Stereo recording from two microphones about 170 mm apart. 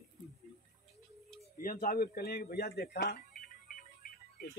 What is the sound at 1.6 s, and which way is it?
Speech, 55° left (ahead or behind).